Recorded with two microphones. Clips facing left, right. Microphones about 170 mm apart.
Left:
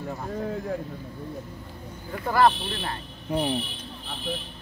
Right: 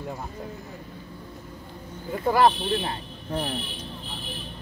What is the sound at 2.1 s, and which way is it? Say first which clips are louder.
Speech: right 1 dB; 15° right (ahead or behind).